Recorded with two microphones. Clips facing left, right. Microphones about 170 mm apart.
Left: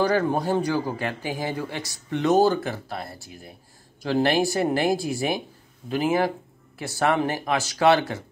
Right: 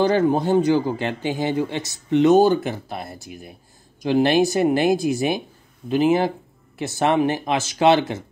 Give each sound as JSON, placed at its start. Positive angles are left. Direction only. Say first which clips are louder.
{"t": 0.0, "sound": "speech", "louder": "right 4 dB", "side_deg": -25}